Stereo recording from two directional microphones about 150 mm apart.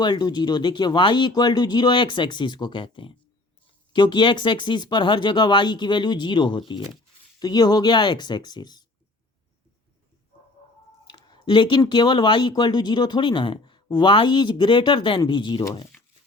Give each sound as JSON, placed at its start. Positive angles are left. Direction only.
{"t": 0.0, "sound": "speech", "side_deg": 30}
{"t": 11.0, "sound": "speech", "side_deg": 30}